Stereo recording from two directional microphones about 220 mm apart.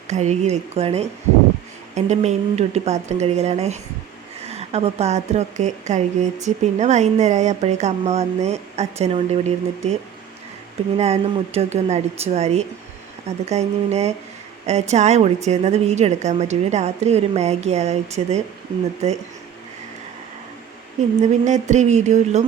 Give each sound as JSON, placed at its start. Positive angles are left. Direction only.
{"t": 0.1, "sound": "speech", "side_deg": -30}
{"t": 10.9, "sound": "speech", "side_deg": -30}
{"t": 21.2, "sound": "speech", "side_deg": -30}